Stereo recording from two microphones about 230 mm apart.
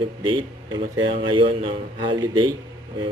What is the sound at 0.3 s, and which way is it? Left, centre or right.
Speech, centre.